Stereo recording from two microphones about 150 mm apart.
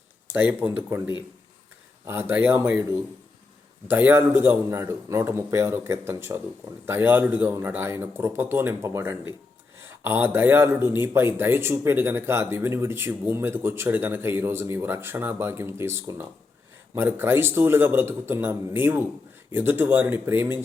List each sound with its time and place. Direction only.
0.3 s speech: 15° right (ahead or behind)